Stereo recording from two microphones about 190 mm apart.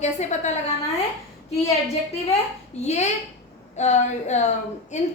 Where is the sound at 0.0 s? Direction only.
35° left (ahead or behind).